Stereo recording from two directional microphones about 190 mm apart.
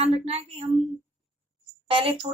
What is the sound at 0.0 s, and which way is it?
Speech, 30° right (ahead or behind).